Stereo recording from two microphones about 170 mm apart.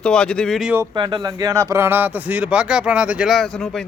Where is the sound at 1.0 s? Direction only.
30° right (ahead or behind).